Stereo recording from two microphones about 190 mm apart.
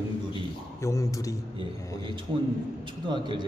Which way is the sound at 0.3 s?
15° left (ahead or behind).